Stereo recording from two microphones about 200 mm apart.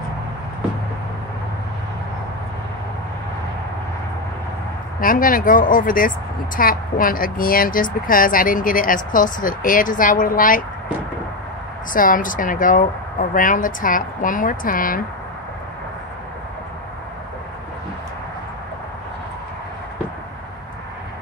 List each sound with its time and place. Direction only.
5.0 s speech: 45° left (ahead or behind)
11.9 s speech: 45° left (ahead or behind)